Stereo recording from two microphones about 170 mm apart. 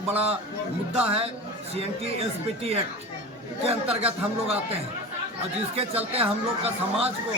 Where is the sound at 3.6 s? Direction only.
35° right (ahead or behind).